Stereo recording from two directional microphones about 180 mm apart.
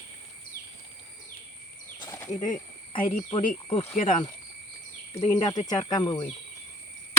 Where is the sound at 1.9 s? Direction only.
20° left (ahead or behind).